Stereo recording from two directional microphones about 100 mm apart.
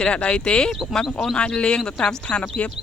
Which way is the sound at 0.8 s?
Centre (ahead or behind).